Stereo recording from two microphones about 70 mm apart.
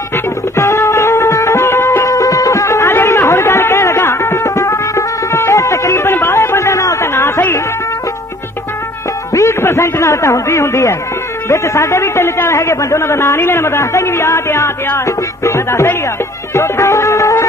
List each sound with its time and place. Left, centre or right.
0.1 s music: left
6.3 s a sound: left
9.3 s a man's voice: left
15.0 s music: left